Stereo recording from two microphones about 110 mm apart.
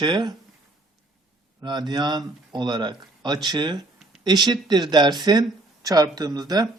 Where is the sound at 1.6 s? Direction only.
40° right (ahead or behind).